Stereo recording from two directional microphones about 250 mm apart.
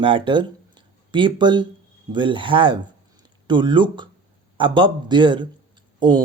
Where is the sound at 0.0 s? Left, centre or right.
Centre.